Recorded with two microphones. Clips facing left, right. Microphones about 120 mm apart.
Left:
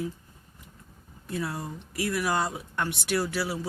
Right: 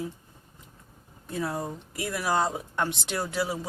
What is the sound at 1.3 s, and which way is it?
Speech, 25° right (ahead or behind).